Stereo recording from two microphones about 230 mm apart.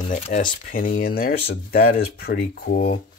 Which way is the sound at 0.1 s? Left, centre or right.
Left.